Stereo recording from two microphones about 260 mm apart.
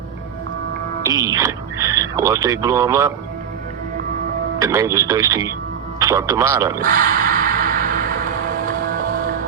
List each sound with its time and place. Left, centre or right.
1.0 s speech: centre
4.6 s speech: centre
6.8 s music: right